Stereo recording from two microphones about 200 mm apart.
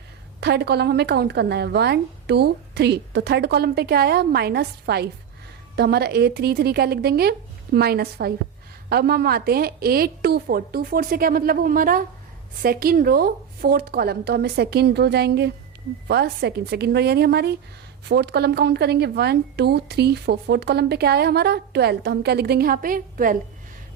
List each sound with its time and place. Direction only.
0.3 s a woman's voice: 55° right (ahead or behind)